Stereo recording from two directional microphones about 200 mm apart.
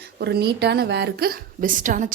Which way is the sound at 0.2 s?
55° right (ahead or behind).